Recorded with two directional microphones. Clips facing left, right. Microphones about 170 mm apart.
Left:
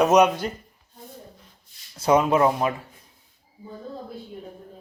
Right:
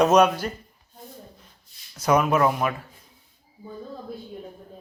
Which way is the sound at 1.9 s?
25° left (ahead or behind).